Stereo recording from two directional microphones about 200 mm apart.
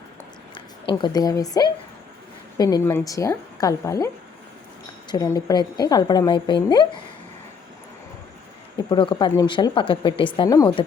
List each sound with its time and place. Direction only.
0.5 s a woman's voice: 25° left (ahead or behind)
8.9 s a woman's voice: 25° left (ahead or behind)